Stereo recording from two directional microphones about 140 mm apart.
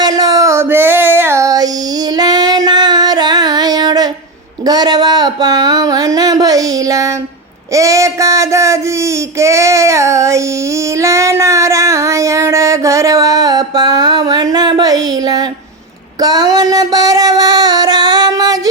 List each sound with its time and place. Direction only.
0.0 s female singing: 25° right (ahead or behind)
4.6 s a sound: 30° right (ahead or behind)
16.2 s child singing: 25° right (ahead or behind)